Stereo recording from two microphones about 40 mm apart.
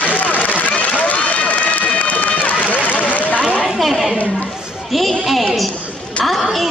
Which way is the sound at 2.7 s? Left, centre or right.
Left.